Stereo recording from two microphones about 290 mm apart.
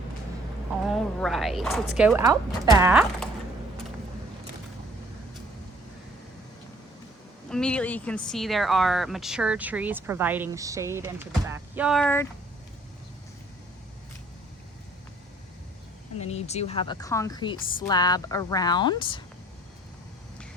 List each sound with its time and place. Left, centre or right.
0.9 s speech: centre
7.5 s speech: centre
16.1 s a woman's voice: left